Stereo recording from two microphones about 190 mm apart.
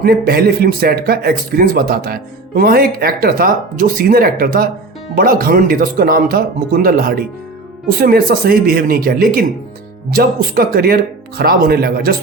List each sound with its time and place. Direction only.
0.0 s speech: 50° right (ahead or behind)